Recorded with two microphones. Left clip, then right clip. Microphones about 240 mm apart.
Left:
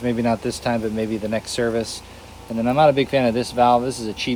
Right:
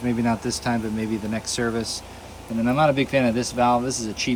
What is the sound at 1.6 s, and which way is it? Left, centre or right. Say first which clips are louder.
Speech: left 3 dB; left.